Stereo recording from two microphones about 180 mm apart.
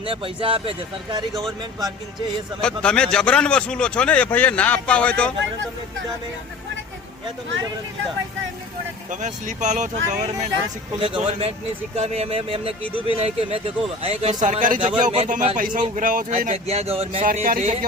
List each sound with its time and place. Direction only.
0.0 s speech: 30° right (ahead or behind)
1.3 s a man's voice: centre (ahead or behind)
2.6 s a man's voice: 5° left (ahead or behind)
9.0 s a man's voice: 45° right (ahead or behind)
14.4 s a man's voice: 45° right (ahead or behind)
16.4 s speech: 35° right (ahead or behind)
17.2 s a man's voice: 50° right (ahead or behind)